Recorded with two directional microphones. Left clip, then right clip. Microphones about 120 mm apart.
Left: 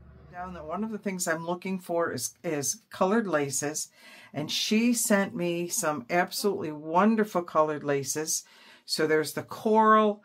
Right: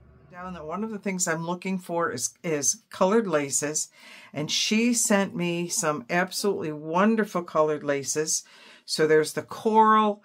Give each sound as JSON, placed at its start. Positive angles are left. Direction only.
{"t": 0.4, "sound": "speech", "side_deg": -40}